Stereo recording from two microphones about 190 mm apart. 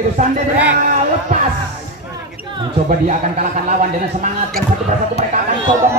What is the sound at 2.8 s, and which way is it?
Speech, 40° right (ahead or behind).